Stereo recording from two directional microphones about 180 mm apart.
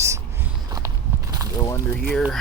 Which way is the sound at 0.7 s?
20° right (ahead or behind).